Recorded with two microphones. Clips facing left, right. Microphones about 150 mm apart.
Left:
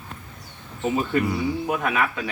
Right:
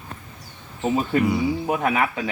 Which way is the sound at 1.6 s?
30° right (ahead or behind).